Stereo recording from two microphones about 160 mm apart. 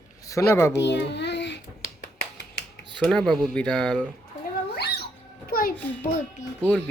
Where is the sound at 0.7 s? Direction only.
90° left.